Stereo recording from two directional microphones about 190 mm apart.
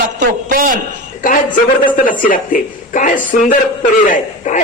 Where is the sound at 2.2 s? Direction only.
45° left (ahead or behind).